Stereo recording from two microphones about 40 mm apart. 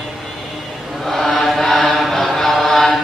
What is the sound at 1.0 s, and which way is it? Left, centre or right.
Mantra, centre.